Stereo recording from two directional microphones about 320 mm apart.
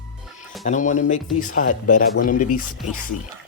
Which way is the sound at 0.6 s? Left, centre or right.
Left.